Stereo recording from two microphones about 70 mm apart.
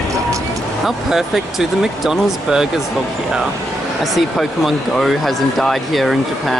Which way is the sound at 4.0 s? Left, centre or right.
Centre.